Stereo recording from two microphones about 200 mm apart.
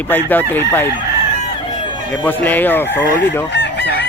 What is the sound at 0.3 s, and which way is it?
Chicken, 10° left (ahead or behind).